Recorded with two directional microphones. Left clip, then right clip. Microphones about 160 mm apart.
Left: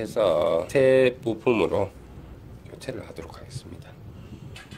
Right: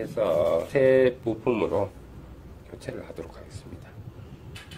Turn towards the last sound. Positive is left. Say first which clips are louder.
# left 1 dB
turn(degrees=30)  # may be behind; listen again after turning